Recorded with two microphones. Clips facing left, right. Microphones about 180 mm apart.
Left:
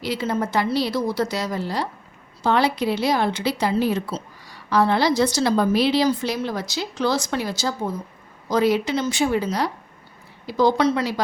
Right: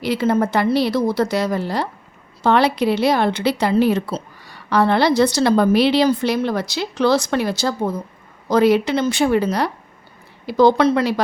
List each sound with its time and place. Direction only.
0.0 s a woman's voice: 60° right (ahead or behind)